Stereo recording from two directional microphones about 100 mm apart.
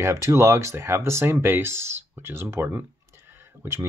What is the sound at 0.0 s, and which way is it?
Speech, 30° right (ahead or behind).